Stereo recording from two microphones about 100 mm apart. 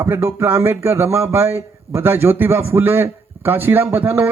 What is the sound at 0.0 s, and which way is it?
Speech, 25° right (ahead or behind).